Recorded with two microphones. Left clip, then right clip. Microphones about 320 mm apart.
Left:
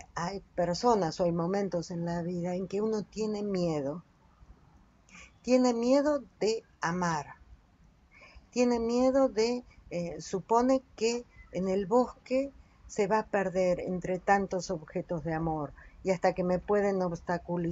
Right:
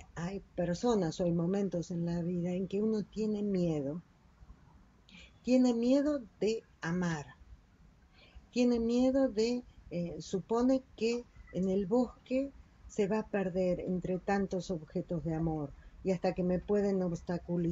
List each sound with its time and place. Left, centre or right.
0.0 s speech: left
5.1 s a sound: left
6.4 s speech: left
8.5 s speech: left